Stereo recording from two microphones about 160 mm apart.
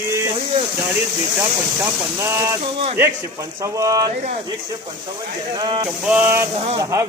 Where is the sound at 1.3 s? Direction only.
15° right (ahead or behind).